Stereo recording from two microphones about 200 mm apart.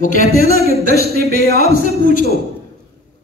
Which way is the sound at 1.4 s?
50° right (ahead or behind).